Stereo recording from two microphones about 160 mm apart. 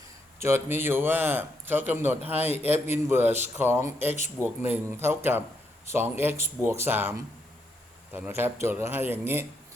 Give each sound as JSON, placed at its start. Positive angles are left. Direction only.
{"t": 0.3, "sound": "a man's voice", "side_deg": -15}